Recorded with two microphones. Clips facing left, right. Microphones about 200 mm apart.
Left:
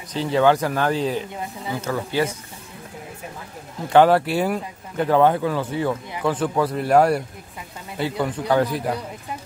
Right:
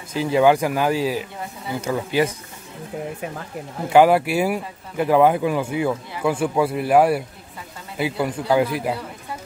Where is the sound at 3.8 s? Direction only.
10° right (ahead or behind).